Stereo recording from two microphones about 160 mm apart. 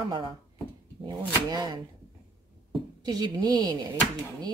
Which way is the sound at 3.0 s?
25° right (ahead or behind).